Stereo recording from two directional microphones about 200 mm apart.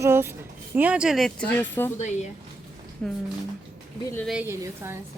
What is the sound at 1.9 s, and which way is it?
Speech, 35° left (ahead or behind).